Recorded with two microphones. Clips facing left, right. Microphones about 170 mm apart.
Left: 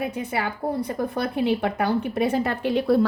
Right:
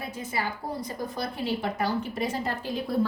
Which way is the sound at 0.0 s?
65° left (ahead or behind).